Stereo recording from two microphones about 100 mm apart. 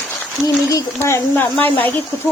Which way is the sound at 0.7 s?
30° left (ahead or behind).